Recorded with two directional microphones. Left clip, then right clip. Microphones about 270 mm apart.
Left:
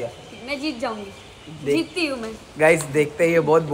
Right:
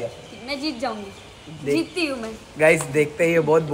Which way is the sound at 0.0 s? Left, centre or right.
Centre.